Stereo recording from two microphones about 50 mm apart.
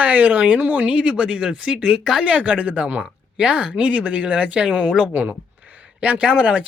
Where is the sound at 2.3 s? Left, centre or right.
Right.